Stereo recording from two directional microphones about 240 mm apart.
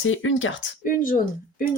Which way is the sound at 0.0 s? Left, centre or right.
Left.